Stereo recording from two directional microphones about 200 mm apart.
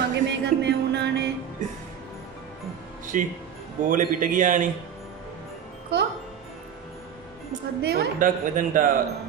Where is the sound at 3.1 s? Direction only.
40° right (ahead or behind).